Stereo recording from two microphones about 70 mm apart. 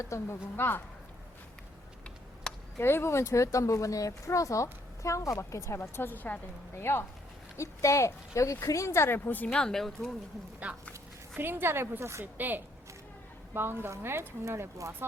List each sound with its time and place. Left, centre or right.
0.0 s speech: left
0.5 s speech: left
2.7 s speech: left
6.7 s speech: left
9.5 s speech: centre
10.6 s speech: centre
11.3 s speech: right
12.2 s a woman's voice: right